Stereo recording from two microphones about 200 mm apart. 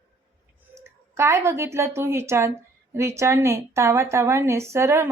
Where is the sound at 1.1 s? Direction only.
15° right (ahead or behind).